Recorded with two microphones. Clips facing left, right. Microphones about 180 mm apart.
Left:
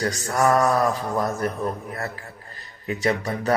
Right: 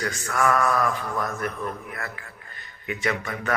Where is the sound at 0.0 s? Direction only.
35° left (ahead or behind).